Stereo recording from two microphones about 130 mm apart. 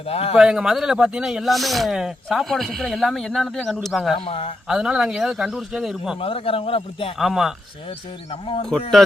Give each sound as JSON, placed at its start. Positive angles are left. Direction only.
{"t": 0.0, "sound": "a man's voice", "side_deg": 50}
{"t": 0.3, "sound": "speech", "side_deg": -5}
{"t": 4.1, "sound": "a man's voice", "side_deg": 50}
{"t": 4.7, "sound": "speech", "side_deg": -5}
{"t": 6.1, "sound": "a man's voice", "side_deg": 45}
{"t": 7.2, "sound": "speech", "side_deg": 0}
{"t": 8.3, "sound": "speech", "side_deg": 40}